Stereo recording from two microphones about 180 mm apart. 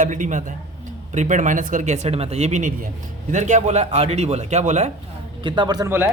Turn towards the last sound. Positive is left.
turn(degrees=-15)  # may be behind; listen again after turning